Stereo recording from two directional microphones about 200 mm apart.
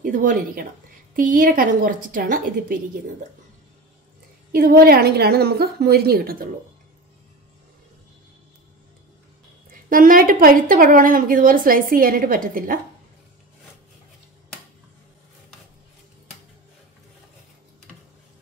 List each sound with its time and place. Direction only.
0.0 s speech: 40° right (ahead or behind)
4.5 s speech: 45° right (ahead or behind)
9.7 s speech: 45° right (ahead or behind)